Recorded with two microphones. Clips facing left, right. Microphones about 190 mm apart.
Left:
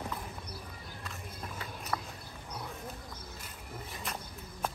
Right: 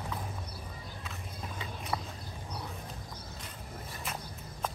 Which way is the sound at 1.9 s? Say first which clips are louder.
Right 1 dB; 10° right (ahead or behind).